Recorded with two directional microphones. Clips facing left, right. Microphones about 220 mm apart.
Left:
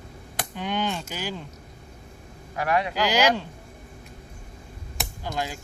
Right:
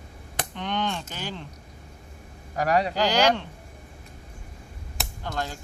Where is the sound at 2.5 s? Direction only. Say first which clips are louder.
Right 2 dB; 35° right (ahead or behind).